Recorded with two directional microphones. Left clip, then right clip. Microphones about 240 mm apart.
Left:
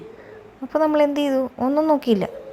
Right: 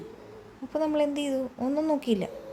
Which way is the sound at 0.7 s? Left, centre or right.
Centre.